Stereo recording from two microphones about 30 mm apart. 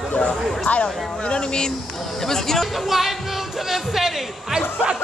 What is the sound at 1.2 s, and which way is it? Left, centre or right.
Speech, left.